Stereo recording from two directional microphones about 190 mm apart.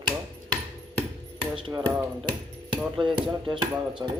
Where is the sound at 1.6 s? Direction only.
20° right (ahead or behind).